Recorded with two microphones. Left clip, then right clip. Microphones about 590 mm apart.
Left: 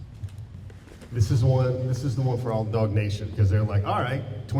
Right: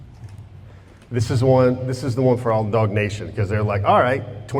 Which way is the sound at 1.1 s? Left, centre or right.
Right.